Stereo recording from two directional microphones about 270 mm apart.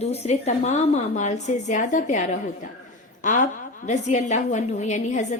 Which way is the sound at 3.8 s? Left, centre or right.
Left.